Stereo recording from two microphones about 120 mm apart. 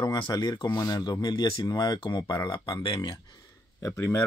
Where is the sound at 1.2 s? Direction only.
45° left (ahead or behind).